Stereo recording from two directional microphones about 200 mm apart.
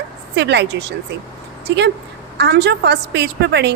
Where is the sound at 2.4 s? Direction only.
60° right (ahead or behind).